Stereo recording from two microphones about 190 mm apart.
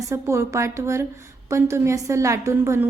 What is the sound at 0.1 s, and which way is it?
A woman's voice, 15° right (ahead or behind).